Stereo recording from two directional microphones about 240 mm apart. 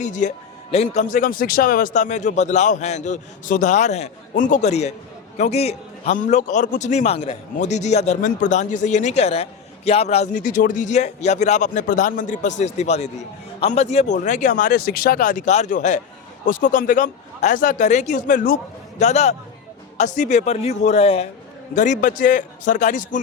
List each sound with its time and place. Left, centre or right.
0.0 s a man's voice: left